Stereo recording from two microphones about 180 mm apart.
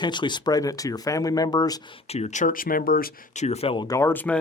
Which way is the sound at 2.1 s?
40° left (ahead or behind).